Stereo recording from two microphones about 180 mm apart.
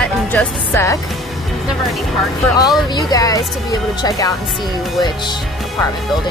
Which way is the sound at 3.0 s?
20° left (ahead or behind).